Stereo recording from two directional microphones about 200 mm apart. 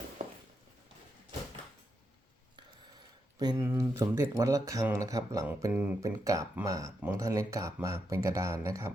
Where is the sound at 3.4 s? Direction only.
15° right (ahead or behind).